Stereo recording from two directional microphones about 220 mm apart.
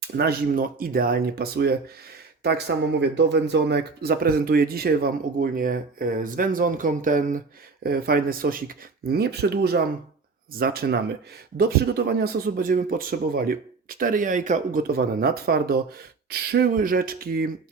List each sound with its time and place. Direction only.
0.2 s speech: 45° right (ahead or behind)